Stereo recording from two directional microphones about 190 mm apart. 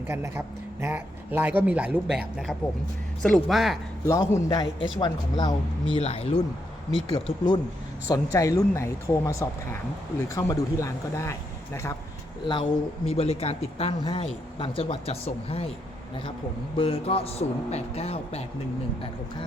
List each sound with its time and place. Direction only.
0.1 s speech: 15° right (ahead or behind)
4.0 s a man's voice: 15° left (ahead or behind)
13.1 s speech: 30° left (ahead or behind)
16.7 s speech: 30° left (ahead or behind)